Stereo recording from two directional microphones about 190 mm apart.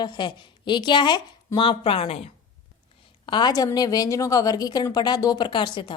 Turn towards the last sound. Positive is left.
turn(degrees=25)  # may be behind; listen again after turning